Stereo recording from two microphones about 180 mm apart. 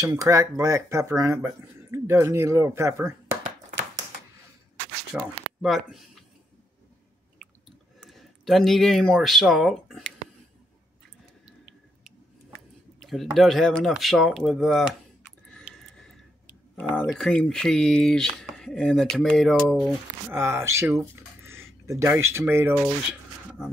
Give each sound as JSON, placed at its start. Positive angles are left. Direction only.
{"t": 0.0, "sound": "speech", "side_deg": -20}
{"t": 5.1, "sound": "speech", "side_deg": -5}
{"t": 8.0, "sound": "speech", "side_deg": 0}
{"t": 13.0, "sound": "speech", "side_deg": 0}
{"t": 15.6, "sound": "a sound", "side_deg": 0}
{"t": 16.9, "sound": "speech", "side_deg": 5}
{"t": 20.2, "sound": "speech", "side_deg": -15}
{"t": 23.6, "sound": "speech", "side_deg": 0}